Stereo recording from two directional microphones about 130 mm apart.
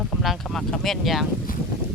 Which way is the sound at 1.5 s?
90° left.